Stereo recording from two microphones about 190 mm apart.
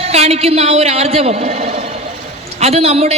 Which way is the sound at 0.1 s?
35° right (ahead or behind).